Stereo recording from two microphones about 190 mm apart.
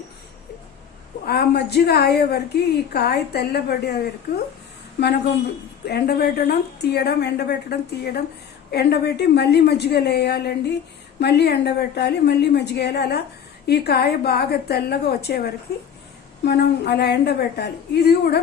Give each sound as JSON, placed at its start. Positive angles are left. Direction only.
{"t": 1.3, "sound": "a woman's voice", "side_deg": 55}
{"t": 4.9, "sound": "a woman's voice", "side_deg": 60}